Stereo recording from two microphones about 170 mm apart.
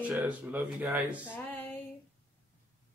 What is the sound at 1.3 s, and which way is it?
Female singing, 10° left (ahead or behind).